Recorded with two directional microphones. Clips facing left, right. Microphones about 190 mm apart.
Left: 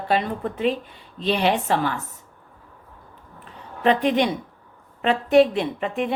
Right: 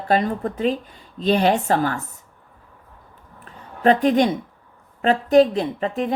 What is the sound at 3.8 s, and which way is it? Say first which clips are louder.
Speech: right 3 dB; 40° right (ahead or behind).